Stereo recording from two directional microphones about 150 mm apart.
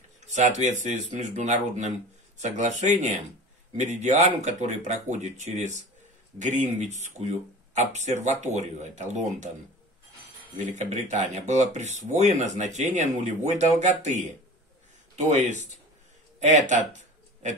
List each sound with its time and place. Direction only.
0.3 s speech: 55° right (ahead or behind)
10.6 s speech: 50° right (ahead or behind)
16.3 s a sound: 50° right (ahead or behind)